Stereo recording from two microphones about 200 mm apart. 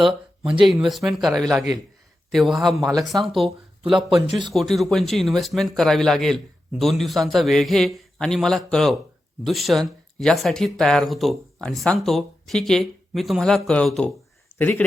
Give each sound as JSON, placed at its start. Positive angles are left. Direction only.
{"t": 0.6, "sound": "speech", "side_deg": 0}